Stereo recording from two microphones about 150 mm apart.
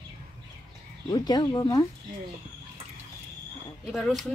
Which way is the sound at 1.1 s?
25° left (ahead or behind).